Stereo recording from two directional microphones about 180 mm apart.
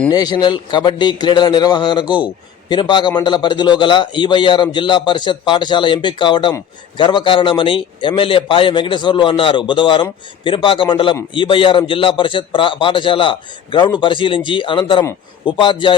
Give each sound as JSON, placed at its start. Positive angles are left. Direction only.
{"t": 0.1, "sound": "a man's voice", "side_deg": 25}